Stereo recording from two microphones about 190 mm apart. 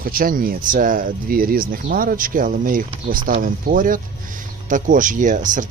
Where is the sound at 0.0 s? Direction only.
50° right (ahead or behind).